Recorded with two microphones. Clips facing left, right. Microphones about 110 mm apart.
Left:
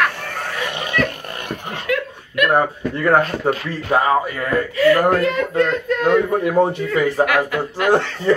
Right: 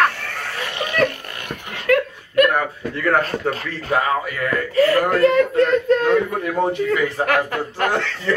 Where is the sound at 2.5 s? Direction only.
30° left (ahead or behind).